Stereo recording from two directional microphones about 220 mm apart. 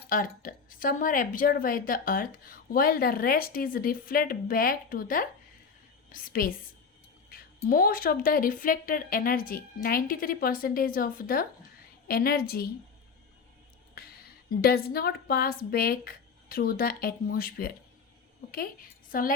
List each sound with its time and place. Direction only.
0.1 s a woman's voice: 40° left (ahead or behind)
14.5 s a woman's voice: 45° left (ahead or behind)